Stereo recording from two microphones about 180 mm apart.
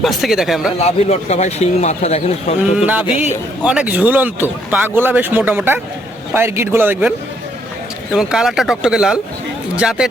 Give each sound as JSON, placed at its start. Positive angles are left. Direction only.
{"t": 0.0, "sound": "speech", "side_deg": 0}
{"t": 0.8, "sound": "speech", "side_deg": 35}
{"t": 2.7, "sound": "a man's voice", "side_deg": -10}
{"t": 8.1, "sound": "speech", "side_deg": -5}